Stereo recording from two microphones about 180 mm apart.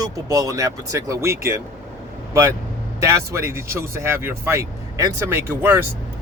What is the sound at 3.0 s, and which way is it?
Speech, 15° right (ahead or behind).